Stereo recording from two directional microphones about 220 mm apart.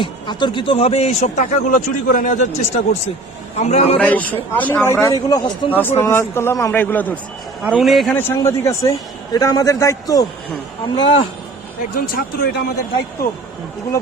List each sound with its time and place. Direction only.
0.0 s speech: 20° left (ahead or behind)
3.9 s speech: 5° left (ahead or behind)
7.6 s a man's voice: 5° right (ahead or behind); by 11.3 s 20° left (ahead or behind)
11.9 s speech: 45° left (ahead or behind)